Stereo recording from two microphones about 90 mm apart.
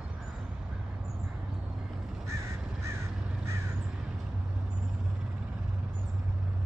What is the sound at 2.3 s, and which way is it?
Crow, 35° right (ahead or behind).